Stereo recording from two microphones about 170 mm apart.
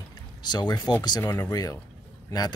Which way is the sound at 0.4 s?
25° left (ahead or behind).